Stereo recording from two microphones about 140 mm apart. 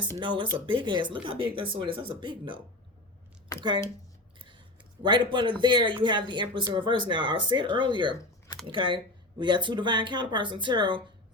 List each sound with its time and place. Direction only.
0.2 s speech: 35° right (ahead or behind)
3.5 s a sound: 25° left (ahead or behind)
5.0 s speech: 35° right (ahead or behind)